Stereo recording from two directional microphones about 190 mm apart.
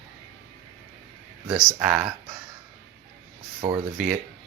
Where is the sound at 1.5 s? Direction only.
10° right (ahead or behind).